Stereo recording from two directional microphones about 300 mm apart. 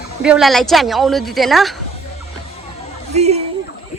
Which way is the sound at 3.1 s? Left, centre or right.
Right.